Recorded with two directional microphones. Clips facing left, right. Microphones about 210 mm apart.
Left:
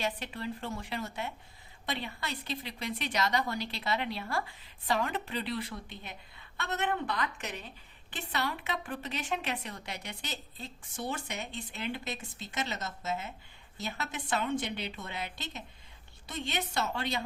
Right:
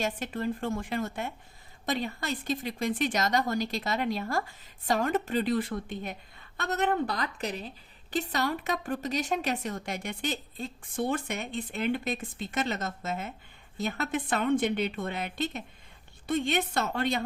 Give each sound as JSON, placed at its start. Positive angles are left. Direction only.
{"t": 0.0, "sound": "a woman's voice", "side_deg": -45}